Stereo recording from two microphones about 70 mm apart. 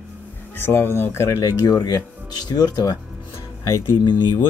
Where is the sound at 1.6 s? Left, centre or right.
Left.